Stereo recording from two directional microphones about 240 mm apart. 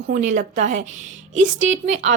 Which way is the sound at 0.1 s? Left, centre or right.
Right.